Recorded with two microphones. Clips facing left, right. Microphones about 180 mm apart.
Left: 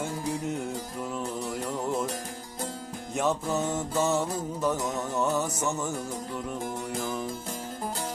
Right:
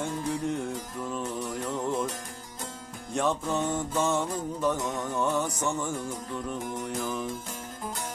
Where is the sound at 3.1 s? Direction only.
5° left (ahead or behind).